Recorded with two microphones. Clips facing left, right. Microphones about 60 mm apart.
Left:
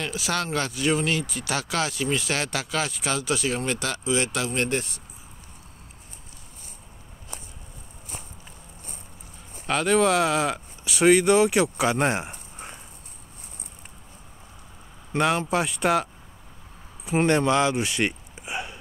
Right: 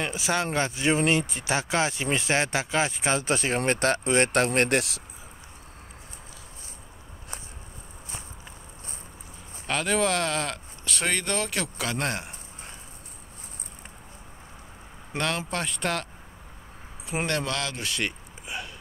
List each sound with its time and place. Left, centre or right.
0.0 s speech: right
4.5 s speech: right
9.7 s speech: centre; by 12.7 s left
15.1 s speech: centre
17.5 s a sound: left